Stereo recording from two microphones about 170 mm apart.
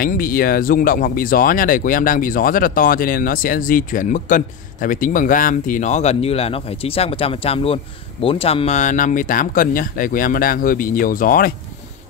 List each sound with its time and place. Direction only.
0.0 s speech: 60° left (ahead or behind)